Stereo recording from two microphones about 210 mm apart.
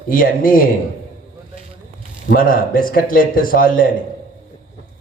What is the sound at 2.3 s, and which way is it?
A man's voice, 40° left (ahead or behind).